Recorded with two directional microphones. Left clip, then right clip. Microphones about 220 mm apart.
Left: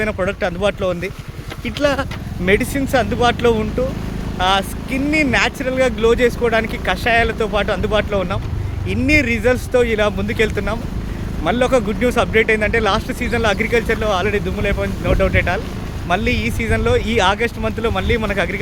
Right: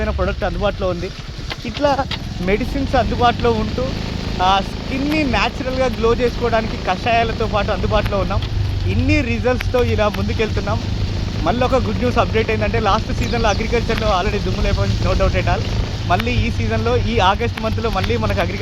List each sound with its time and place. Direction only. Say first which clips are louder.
0.0 s speech: left 2 dB; 25° left (ahead or behind)